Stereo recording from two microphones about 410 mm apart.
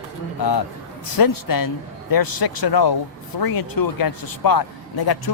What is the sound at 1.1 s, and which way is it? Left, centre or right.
A man's voice, left.